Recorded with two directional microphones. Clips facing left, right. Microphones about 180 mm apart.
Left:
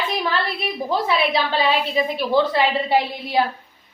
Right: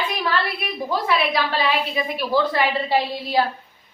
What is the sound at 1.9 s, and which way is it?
Speech, 20° left (ahead or behind).